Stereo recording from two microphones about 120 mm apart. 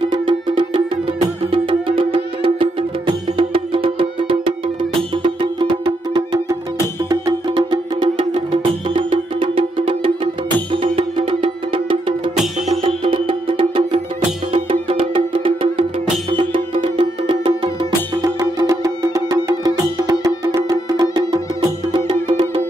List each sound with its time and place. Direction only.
0.0 s music: 40° right (ahead or behind)
12.5 s music: 60° right (ahead or behind); by 22.2 s 40° right (ahead or behind)